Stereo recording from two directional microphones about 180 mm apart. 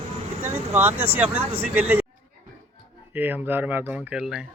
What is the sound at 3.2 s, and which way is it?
Speech, 10° right (ahead or behind).